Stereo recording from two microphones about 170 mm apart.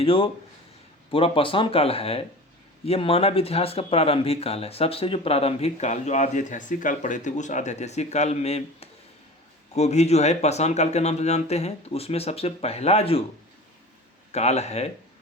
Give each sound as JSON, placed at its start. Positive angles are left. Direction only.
{"t": 0.0, "sound": "speech", "side_deg": 30}
{"t": 14.3, "sound": "speech", "side_deg": 40}